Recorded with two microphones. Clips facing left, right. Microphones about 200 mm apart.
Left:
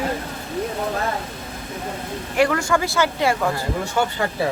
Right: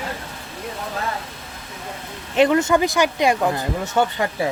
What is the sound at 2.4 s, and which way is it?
Speech, 20° right (ahead or behind).